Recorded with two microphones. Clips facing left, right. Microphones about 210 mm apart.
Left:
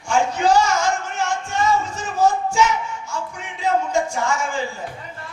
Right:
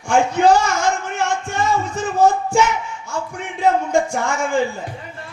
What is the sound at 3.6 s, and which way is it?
Speech, 55° right (ahead or behind).